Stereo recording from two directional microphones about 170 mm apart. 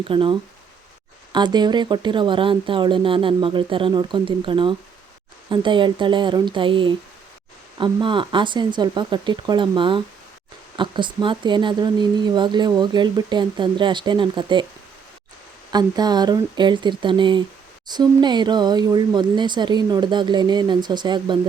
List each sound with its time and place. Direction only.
0.1 s a woman's voice: 30° right (ahead or behind)
8.0 s a woman's voice: 30° right (ahead or behind)
15.7 s a woman's voice: 25° right (ahead or behind)